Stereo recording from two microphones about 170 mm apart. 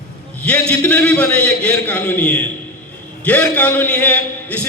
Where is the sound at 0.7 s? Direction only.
10° left (ahead or behind).